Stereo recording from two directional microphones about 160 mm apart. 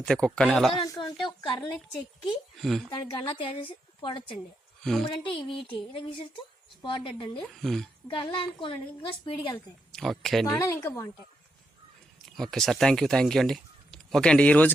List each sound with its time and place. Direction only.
0.0 s speech: 5° left (ahead or behind)
0.9 s a sound: 25° left (ahead or behind)
1.3 s a woman's voice: 25° left (ahead or behind)
2.6 s speech: centre (ahead or behind)
2.9 s a woman's voice: 30° left (ahead or behind)
4.8 s speech: 5° left (ahead or behind)
5.0 s a woman's voice: 30° left (ahead or behind)
7.4 s speech: centre (ahead or behind)
8.1 s a woman's voice: 30° left (ahead or behind)
9.9 s speech: centre (ahead or behind)
10.5 s a woman's voice: 15° left (ahead or behind)
12.4 s speech: centre (ahead or behind)